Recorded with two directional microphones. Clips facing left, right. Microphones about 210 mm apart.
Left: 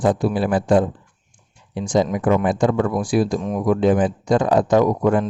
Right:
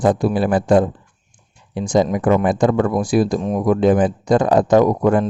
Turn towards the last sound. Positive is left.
turn(degrees=-40)  # may be behind; listen again after turning